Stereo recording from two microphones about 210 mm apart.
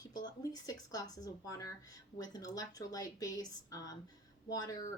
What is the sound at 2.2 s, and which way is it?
Speech, 20° left (ahead or behind).